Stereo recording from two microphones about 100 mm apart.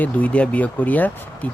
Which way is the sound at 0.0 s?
15° left (ahead or behind).